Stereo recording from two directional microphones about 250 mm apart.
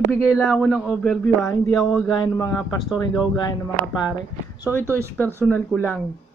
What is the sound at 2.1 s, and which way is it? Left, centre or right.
Speech, centre.